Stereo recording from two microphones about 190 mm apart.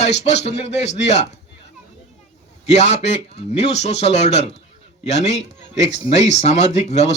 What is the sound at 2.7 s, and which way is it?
Speech, 35° left (ahead or behind).